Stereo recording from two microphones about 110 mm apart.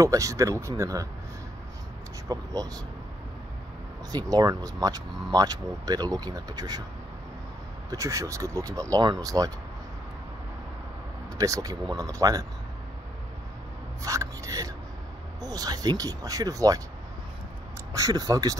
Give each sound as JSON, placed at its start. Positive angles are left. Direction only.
{"t": 0.0, "sound": "speech", "side_deg": -30}
{"t": 2.2, "sound": "speech", "side_deg": -35}
{"t": 4.1, "sound": "speech", "side_deg": -35}
{"t": 7.9, "sound": "speech", "side_deg": -30}
{"t": 11.3, "sound": "speech", "side_deg": -30}
{"t": 14.0, "sound": "speech", "side_deg": -30}
{"t": 17.9, "sound": "speech", "side_deg": -35}